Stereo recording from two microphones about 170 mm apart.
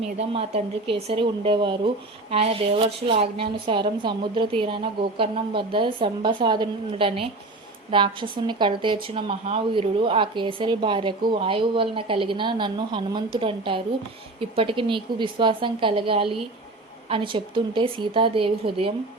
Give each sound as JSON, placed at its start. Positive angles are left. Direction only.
{"t": 0.2, "sound": "a woman's voice", "side_deg": -35}